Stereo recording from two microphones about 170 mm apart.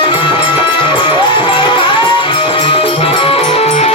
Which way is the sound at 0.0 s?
30° left (ahead or behind).